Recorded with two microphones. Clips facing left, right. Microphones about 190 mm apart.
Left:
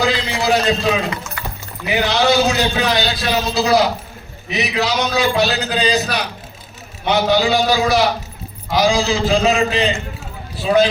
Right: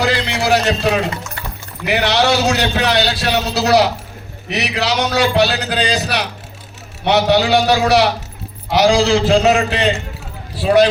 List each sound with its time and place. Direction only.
0.0 s music: 70° right (ahead or behind)
1.9 s a man's voice: 75° right (ahead or behind)